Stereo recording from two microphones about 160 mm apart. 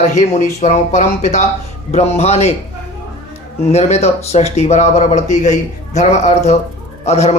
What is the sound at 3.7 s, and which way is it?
Speech, 40° left (ahead or behind).